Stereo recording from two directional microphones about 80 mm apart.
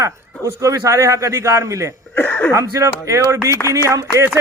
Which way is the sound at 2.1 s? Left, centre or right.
Left.